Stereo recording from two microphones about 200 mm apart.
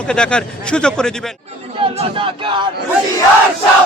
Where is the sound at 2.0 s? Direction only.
25° right (ahead or behind).